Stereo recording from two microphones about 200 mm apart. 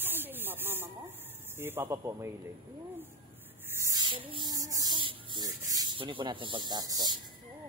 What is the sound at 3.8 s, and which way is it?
Speech, 20° right (ahead or behind).